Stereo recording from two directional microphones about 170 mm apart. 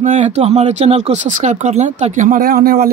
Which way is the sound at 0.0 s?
45° right (ahead or behind).